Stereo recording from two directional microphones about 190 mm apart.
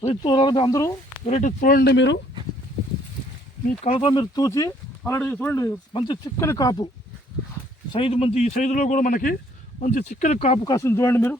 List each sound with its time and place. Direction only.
0.0 s speech: 30° left (ahead or behind)
1.2 s speech: 35° left (ahead or behind); by 2.1 s 65° left (ahead or behind)
3.8 s speech: 25° left (ahead or behind); by 5.7 s 10° left (ahead or behind)
5.9 s speech: 25° left (ahead or behind)
7.9 s a man's voice: 30° left (ahead or behind)
10.6 s speech: 15° left (ahead or behind)